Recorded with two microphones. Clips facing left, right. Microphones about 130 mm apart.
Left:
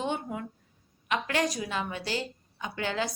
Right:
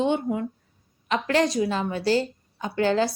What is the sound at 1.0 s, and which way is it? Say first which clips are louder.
A woman's voice: right 6 dB; 35° right (ahead or behind).